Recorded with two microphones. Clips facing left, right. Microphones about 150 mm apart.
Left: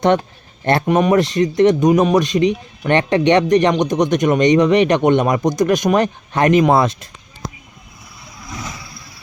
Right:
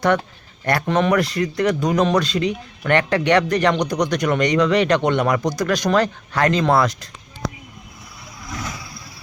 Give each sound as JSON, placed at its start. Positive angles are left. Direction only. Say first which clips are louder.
{"t": 0.6, "sound": "speech", "louder": "left 4 dB", "side_deg": 25}
{"t": 8.4, "sound": "vehicle", "louder": "even", "side_deg": 10}